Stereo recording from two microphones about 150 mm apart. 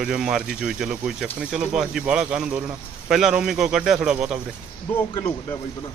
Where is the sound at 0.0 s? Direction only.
5° right (ahead or behind).